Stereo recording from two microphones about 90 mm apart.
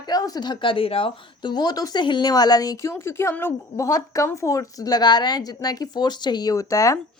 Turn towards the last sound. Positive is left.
turn(degrees=35)  # may be behind; listen again after turning